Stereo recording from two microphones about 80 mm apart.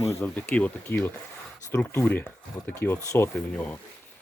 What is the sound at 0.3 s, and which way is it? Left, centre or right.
Speech, centre.